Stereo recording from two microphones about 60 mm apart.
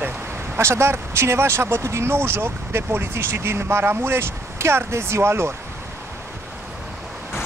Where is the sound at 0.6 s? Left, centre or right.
Right.